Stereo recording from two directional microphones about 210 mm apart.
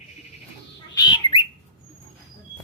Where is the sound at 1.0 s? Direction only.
20° left (ahead or behind).